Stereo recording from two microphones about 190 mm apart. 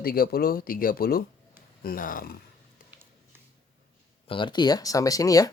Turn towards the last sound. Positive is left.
turn(degrees=20)  # may be behind; listen again after turning